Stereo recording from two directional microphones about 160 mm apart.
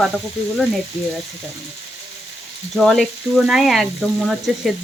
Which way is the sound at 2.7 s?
Centre (ahead or behind).